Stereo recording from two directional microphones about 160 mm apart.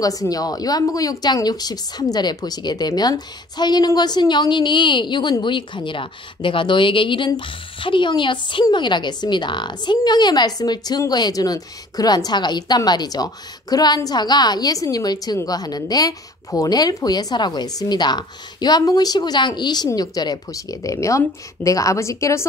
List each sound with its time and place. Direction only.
0.0 s speech: 20° left (ahead or behind)